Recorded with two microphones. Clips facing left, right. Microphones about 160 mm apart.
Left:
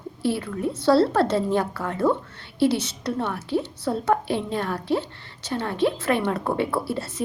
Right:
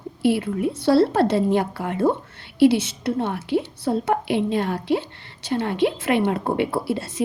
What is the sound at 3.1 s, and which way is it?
A woman's voice, 20° right (ahead or behind).